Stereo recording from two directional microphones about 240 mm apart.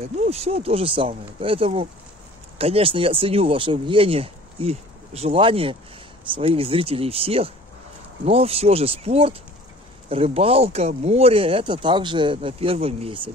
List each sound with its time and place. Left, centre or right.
0.2 s speech: right